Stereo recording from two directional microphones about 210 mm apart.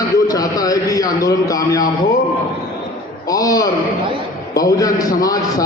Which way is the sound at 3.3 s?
15° left (ahead or behind).